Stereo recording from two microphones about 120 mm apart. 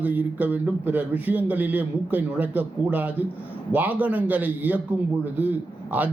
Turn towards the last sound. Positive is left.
turn(degrees=-15)  # may be behind; listen again after turning